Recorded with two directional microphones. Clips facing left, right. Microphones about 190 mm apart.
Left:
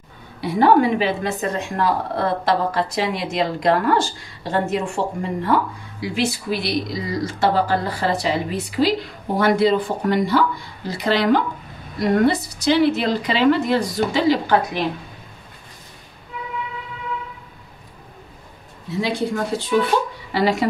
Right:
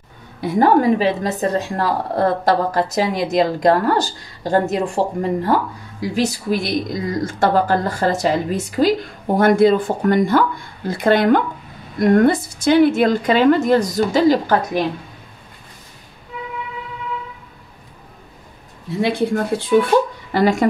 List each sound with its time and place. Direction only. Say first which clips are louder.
0.4 s a woman's voice: right 1 dB; 45° right (ahead or behind)
18.9 s a woman's voice: right 4 dB; 55° right (ahead or behind)